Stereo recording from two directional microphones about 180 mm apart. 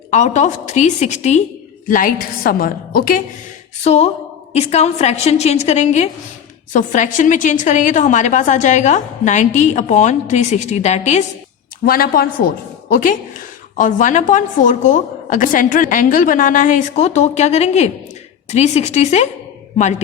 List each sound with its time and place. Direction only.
0.1 s a woman's voice: 40° left (ahead or behind)
3.8 s a woman's voice: 35° left (ahead or behind)
11.9 s a woman's voice: 55° left (ahead or behind); by 19.3 s 40° left (ahead or behind)